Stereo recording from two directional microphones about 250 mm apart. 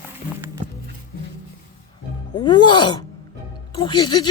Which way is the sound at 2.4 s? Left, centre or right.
Centre.